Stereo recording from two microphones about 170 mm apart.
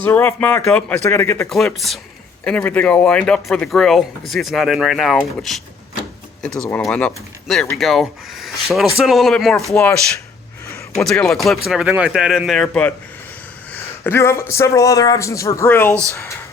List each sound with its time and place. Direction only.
0.0 s speech: 10° left (ahead or behind)
1.5 s speech: centre (ahead or behind)
11.0 s speech: 5° left (ahead or behind)
14.0 s speech: 15° left (ahead or behind)
15.9 s speech: 15° right (ahead or behind)
16.1 s speech: 15° left (ahead or behind)